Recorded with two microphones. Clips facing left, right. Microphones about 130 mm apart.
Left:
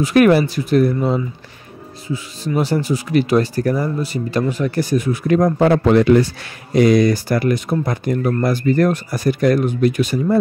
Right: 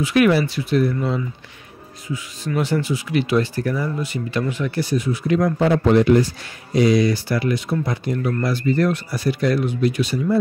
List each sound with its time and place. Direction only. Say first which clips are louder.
0.0 s speech: left 4 dB; 45° left (ahead or behind)
5.9 s a man's voice: left 1 dB; 85° left
6.7 s speech: left 3 dB; 55° left (ahead or behind)